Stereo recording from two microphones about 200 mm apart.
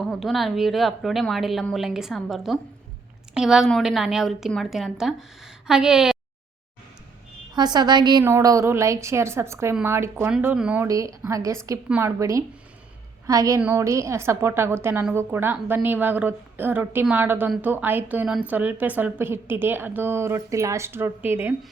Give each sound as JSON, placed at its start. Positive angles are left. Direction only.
{"t": 0.0, "sound": "a woman's voice", "side_deg": 0}
{"t": 7.5, "sound": "a woman's voice", "side_deg": -20}
{"t": 10.8, "sound": "a woman's voice", "side_deg": -15}